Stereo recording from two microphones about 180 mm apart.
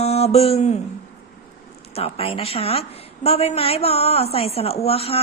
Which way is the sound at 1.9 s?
35° left (ahead or behind).